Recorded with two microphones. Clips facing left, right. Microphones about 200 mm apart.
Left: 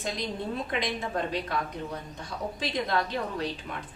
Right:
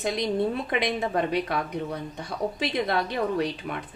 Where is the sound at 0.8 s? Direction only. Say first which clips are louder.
Right 5 dB; 65° right (ahead or behind).